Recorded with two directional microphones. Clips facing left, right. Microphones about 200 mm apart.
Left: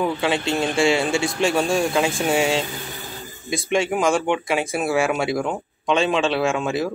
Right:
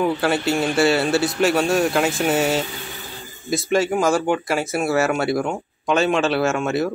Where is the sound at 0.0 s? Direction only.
5° right (ahead or behind).